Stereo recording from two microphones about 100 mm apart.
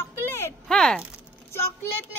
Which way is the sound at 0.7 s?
10° left (ahead or behind).